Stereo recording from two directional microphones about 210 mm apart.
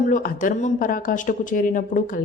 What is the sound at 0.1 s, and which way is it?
A woman's voice, 40° left (ahead or behind).